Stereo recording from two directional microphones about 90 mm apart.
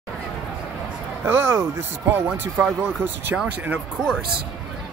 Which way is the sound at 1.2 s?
25° right (ahead or behind).